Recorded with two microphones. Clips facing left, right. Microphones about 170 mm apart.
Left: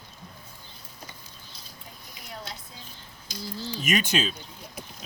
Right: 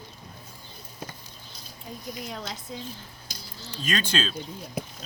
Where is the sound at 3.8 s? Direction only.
15° left (ahead or behind).